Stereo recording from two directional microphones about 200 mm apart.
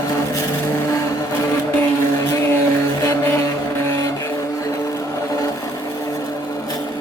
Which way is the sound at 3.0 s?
15° left (ahead or behind).